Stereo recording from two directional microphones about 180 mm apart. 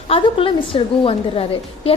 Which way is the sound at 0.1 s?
30° left (ahead or behind).